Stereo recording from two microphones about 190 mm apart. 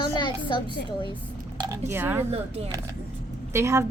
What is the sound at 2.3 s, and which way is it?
Speech, 35° right (ahead or behind).